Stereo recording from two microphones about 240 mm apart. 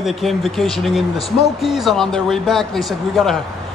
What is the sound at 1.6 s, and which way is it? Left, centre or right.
Speech, centre.